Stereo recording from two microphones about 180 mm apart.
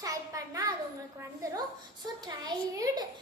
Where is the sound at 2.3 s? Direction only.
20° right (ahead or behind).